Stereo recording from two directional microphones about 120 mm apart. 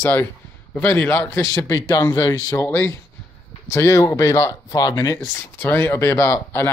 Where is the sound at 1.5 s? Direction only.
30° left (ahead or behind).